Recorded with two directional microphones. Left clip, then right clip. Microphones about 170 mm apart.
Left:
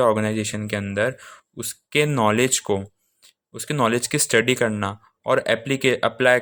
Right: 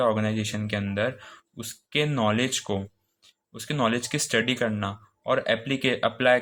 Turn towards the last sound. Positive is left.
turn(degrees=40)  # may be behind; listen again after turning